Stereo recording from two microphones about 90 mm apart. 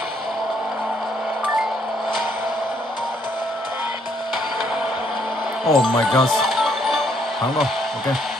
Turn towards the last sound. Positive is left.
turn(degrees=0)  # may be behind; listen again after turning